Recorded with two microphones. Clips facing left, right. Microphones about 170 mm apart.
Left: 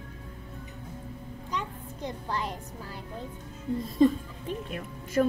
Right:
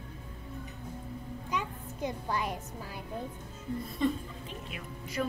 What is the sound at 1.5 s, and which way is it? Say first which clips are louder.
Music: left 1 dB; 10° right (ahead or behind).